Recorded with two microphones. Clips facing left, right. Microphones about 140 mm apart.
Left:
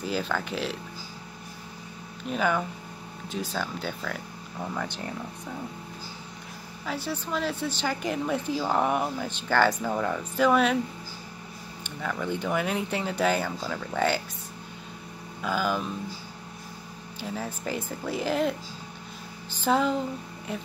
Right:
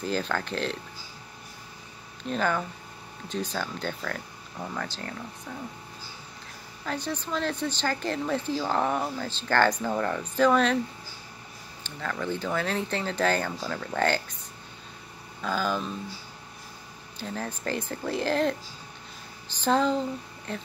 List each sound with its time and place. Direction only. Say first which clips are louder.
0.0 s speech: even; 5° left (ahead or behind)
2.2 s speech: left 1 dB; 10° left (ahead or behind)
4.8 s speech: left 2 dB; 20° left (ahead or behind)
6.8 s speech: even; 5° left (ahead or behind)
11.8 s speech: left 1 dB; 10° left (ahead or behind)
15.4 s speech: left 1 dB; 10° left (ahead or behind)
17.2 s speech: even; 10° left (ahead or behind)
19.6 s speech: even; 5° left (ahead or behind)